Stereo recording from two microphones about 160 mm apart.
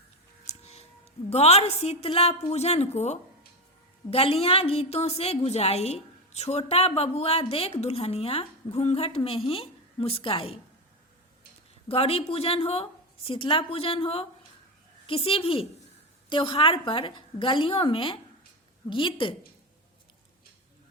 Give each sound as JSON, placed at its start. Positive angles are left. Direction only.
{"t": 0.4, "sound": "a sound", "side_deg": 40}
{"t": 1.3, "sound": "a woman's voice", "side_deg": 40}
{"t": 11.9, "sound": "a woman's voice", "side_deg": 35}